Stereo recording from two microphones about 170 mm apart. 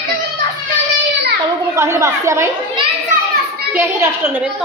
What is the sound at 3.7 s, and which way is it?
Speech, 15° right (ahead or behind).